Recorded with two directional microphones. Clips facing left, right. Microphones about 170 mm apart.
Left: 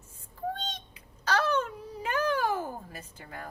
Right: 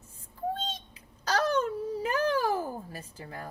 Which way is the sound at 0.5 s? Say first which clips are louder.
Right 2 dB; 35° right (ahead or behind).